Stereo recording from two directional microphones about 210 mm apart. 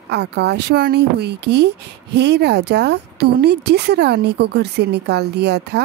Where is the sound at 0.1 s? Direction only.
55° right (ahead or behind).